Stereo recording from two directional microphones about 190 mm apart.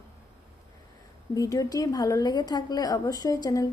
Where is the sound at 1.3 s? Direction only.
20° left (ahead or behind).